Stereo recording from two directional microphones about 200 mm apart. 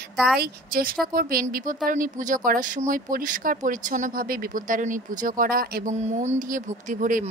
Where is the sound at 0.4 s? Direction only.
45° right (ahead or behind).